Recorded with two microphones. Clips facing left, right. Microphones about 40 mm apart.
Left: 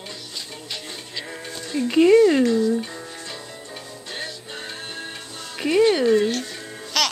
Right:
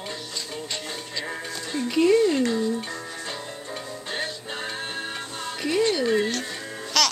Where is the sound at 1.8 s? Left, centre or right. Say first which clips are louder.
Left 5 dB; left.